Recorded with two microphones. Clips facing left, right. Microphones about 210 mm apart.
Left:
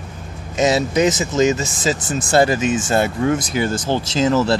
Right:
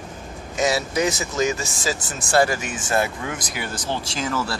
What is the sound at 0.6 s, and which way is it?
Speech, 20° left (ahead or behind).